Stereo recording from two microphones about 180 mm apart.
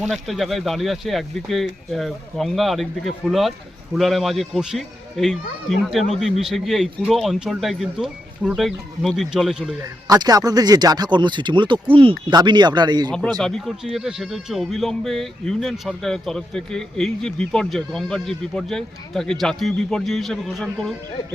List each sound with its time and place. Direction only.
0.0 s speech: centre (ahead or behind)
9.8 s speech: 20° right (ahead or behind)
13.1 s a man's voice: 5° left (ahead or behind)